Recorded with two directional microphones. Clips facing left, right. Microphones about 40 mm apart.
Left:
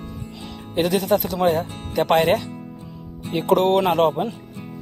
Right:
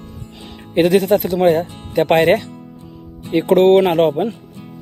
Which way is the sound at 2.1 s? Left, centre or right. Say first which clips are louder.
Right 4 dB; right.